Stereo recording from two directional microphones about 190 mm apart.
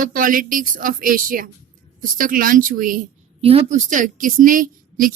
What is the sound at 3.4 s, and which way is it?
A woman's voice, 30° right (ahead or behind).